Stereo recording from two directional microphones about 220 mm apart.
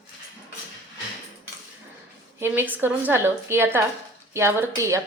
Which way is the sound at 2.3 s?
10° right (ahead or behind).